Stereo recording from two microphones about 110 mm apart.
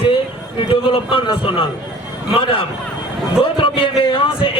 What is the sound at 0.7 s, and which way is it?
A man's voice, 55° left (ahead or behind).